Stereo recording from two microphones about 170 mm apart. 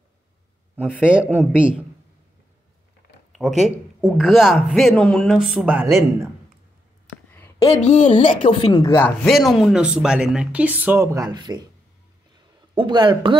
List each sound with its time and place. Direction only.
1.0 s speech: 10° right (ahead or behind)
3.3 s a man's voice: centre (ahead or behind)
7.3 s a sound: 15° left (ahead or behind)
7.7 s a woman's voice: 45° left (ahead or behind)
8.1 s a woman's voice: 30° left (ahead or behind)
9.2 s a man's voice: centre (ahead or behind); by 11.6 s 25° right (ahead or behind)
12.7 s speech: 25° right (ahead or behind)